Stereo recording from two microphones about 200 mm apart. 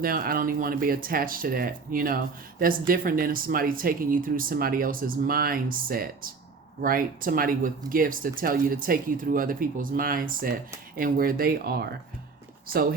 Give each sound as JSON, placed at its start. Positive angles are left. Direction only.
{"t": 0.0, "sound": "speech", "side_deg": -45}